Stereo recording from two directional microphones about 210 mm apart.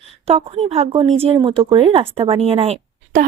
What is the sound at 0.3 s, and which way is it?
Speech, 30° right (ahead or behind).